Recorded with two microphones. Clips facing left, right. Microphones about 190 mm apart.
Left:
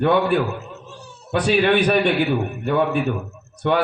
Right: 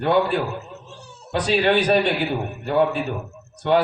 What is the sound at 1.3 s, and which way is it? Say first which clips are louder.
A man's voice: left 2 dB; 55° left (ahead or behind).